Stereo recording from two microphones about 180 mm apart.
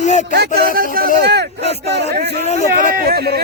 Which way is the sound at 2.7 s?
55° right (ahead or behind).